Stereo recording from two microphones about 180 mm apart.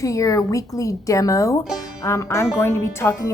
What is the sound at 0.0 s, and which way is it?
A woman's voice, 20° left (ahead or behind).